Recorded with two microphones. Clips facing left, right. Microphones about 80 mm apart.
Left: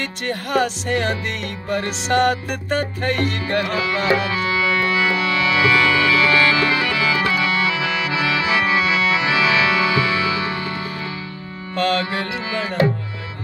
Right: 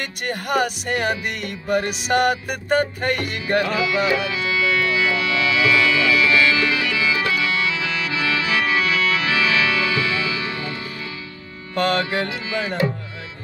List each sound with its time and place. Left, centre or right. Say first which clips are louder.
0.0 s music: left 2 dB; centre
3.8 s speech: right 1 dB; left
4.2 s music: left 2 dB; left
11.7 s music: even; centre